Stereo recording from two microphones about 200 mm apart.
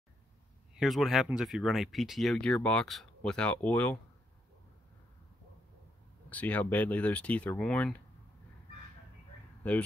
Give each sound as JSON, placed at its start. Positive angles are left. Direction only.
{"t": 0.7, "sound": "speech", "side_deg": 0}
{"t": 6.3, "sound": "speech", "side_deg": 10}
{"t": 9.6, "sound": "a sound", "side_deg": 5}